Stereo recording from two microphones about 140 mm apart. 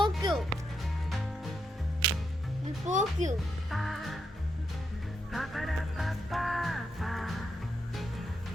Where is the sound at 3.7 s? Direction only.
Centre (ahead or behind).